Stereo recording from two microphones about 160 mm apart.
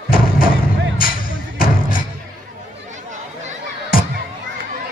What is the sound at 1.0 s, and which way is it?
Music, 65° left (ahead or behind).